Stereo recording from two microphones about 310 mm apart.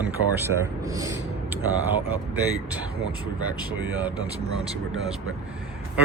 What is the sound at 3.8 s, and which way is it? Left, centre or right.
Speech, centre.